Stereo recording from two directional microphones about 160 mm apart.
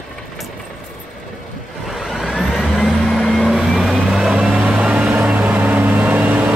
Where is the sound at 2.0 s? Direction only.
Centre (ahead or behind).